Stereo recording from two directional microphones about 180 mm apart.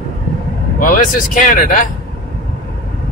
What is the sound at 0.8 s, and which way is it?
Speech, 50° left (ahead or behind).